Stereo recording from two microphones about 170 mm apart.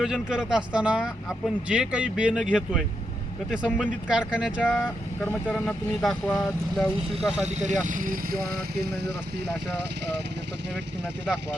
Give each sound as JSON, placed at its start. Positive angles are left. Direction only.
{"t": 0.0, "sound": "speech", "side_deg": -5}
{"t": 7.4, "sound": "speech", "side_deg": -45}